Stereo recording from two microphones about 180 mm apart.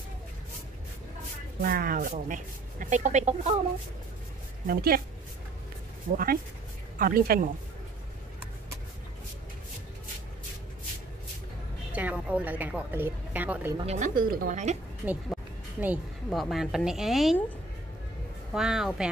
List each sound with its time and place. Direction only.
1.6 s speech: 55° right (ahead or behind)
4.6 s a woman's voice: 55° right (ahead or behind)
6.1 s speech: 50° right (ahead or behind)
11.9 s a woman's voice: 10° right (ahead or behind)
13.7 s speech: 40° right (ahead or behind)
15.0 s speech: 5° right (ahead or behind)
18.5 s a woman's voice: 5° right (ahead or behind)